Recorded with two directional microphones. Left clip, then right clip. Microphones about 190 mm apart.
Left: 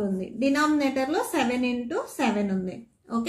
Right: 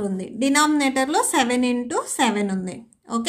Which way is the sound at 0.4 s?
40° right (ahead or behind).